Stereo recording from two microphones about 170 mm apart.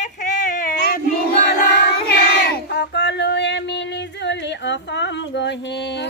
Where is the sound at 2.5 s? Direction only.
90° left.